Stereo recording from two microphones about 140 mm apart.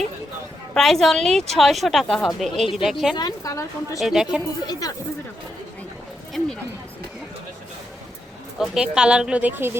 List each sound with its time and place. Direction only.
0.7 s a woman's voice: centre (ahead or behind)
3.2 s a woman's voice: 25° left (ahead or behind)
4.0 s a woman's voice: 5° right (ahead or behind)
4.6 s a woman's voice: 30° left (ahead or behind)
6.4 s speech: 5° left (ahead or behind)
8.5 s speech: 5° right (ahead or behind)